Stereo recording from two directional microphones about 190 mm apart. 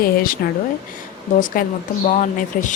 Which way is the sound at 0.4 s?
55° left (ahead or behind).